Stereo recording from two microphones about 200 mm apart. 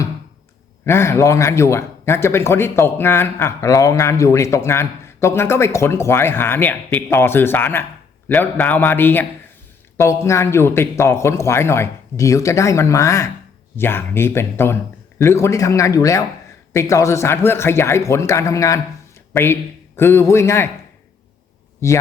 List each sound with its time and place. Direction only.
0.9 s a man's voice: 15° left (ahead or behind)
21.8 s a man's voice: 15° left (ahead or behind)